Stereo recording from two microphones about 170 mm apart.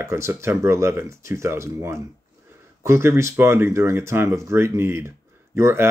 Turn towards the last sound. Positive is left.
turn(degrees=-15)  # may be behind; listen again after turning